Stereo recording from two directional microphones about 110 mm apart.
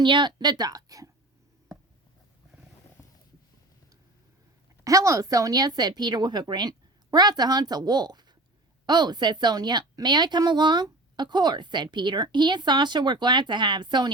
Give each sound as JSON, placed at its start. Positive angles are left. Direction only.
{"t": 0.0, "sound": "speech", "side_deg": -45}
{"t": 4.8, "sound": "a woman's voice", "side_deg": -30}